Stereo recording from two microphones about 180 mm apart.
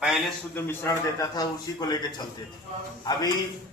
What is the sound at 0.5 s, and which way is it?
A man's voice, 10° left (ahead or behind).